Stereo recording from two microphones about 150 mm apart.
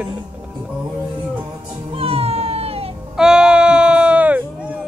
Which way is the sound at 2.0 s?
40° right (ahead or behind).